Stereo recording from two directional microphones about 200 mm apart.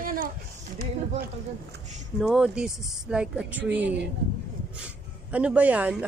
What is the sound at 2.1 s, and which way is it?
A woman's voice, centre (ahead or behind).